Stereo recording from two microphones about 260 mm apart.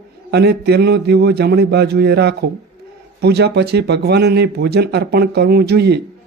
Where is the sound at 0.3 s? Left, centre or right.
Right.